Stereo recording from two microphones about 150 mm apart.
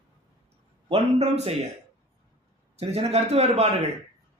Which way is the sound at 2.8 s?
45° right (ahead or behind).